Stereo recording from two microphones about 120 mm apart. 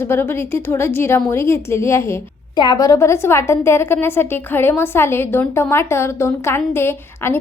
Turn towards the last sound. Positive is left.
turn(degrees=20)  # may be behind; listen again after turning